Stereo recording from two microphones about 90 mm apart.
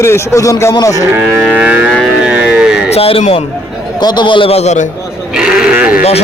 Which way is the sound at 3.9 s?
55° left (ahead or behind).